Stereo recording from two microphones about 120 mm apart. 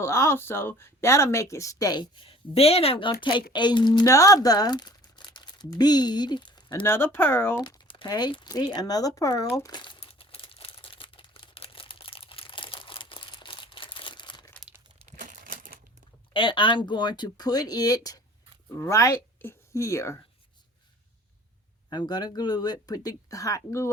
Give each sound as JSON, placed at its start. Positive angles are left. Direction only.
{"t": 0.0, "sound": "speech", "side_deg": 20}
{"t": 2.2, "sound": "a woman's voice", "side_deg": 50}
{"t": 6.8, "sound": "speech", "side_deg": 15}
{"t": 7.6, "sound": "speech", "side_deg": 40}
{"t": 9.7, "sound": "crumpling", "side_deg": 45}
{"t": 15.1, "sound": "crumpling", "side_deg": -90}
{"t": 16.3, "sound": "speech", "side_deg": 45}
{"t": 21.8, "sound": "speech", "side_deg": 35}